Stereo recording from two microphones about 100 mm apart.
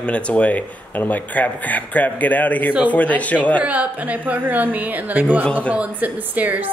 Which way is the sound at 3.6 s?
15° right (ahead or behind).